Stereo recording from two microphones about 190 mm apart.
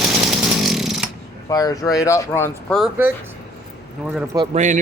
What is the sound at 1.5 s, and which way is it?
Speech, 20° left (ahead or behind).